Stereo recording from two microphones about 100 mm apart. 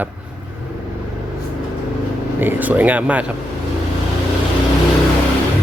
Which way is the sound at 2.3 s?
20° right (ahead or behind).